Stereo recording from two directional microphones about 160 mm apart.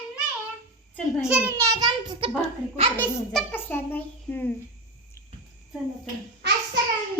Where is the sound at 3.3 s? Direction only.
10° left (ahead or behind).